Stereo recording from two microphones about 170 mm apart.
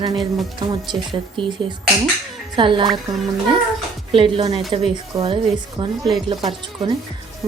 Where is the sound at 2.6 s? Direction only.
30° right (ahead or behind).